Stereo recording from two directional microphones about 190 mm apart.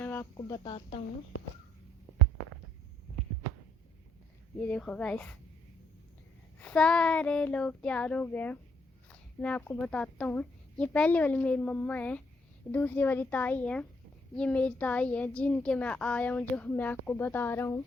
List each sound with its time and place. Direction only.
0.0 s a sound: 10° left (ahead or behind)
0.3 s speech: 20° left (ahead or behind)
4.6 s a woman's voice: 5° left (ahead or behind)
6.6 s a woman's voice: 5° left (ahead or behind)